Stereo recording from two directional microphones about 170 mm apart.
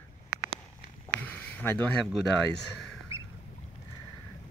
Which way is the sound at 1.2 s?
10° left (ahead or behind).